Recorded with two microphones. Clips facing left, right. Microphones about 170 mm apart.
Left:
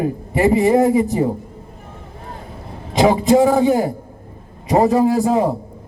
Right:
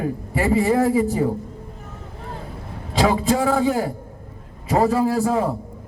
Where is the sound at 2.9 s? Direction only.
20° left (ahead or behind).